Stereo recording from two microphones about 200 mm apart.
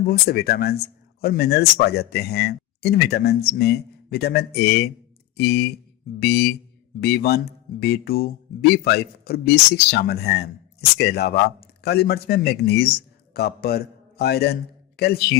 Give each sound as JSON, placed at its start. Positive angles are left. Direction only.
{"t": 0.0, "sound": "a man's voice", "side_deg": 50}